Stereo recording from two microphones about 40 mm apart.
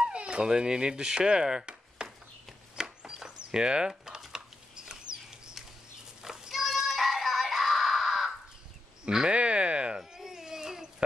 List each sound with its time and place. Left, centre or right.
0.0 s a sound: right
0.5 s speech: centre
2.7 s wood: right
4.3 s a sound: right
6.2 s child singing: centre
6.6 s music: centre
9.1 s speech: centre
9.4 s speech: right
9.9 s baby cry: centre